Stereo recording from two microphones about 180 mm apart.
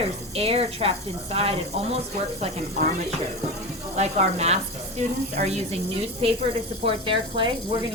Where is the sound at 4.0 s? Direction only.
40° right (ahead or behind).